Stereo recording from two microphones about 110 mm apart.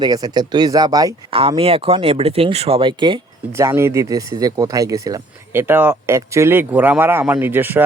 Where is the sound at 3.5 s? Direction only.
25° right (ahead or behind).